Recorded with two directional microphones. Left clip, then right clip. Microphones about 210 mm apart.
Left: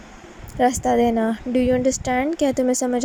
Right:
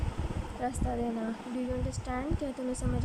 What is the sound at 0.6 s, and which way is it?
A woman's voice, 35° left (ahead or behind).